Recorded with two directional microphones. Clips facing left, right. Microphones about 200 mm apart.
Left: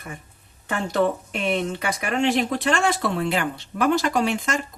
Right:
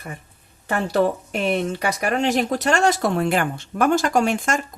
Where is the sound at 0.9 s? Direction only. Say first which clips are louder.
Right 1 dB; 35° right (ahead or behind).